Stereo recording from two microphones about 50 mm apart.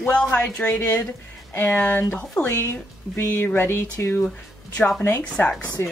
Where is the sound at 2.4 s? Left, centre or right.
Left.